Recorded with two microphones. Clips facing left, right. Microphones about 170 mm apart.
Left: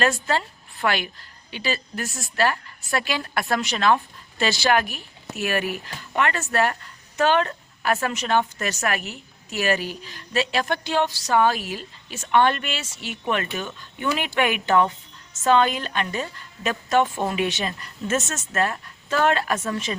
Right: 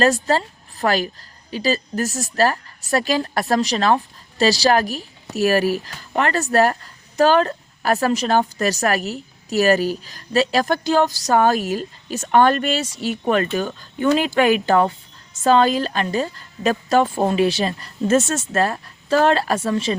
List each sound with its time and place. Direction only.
0.0 s a woman's voice: 40° right (ahead or behind)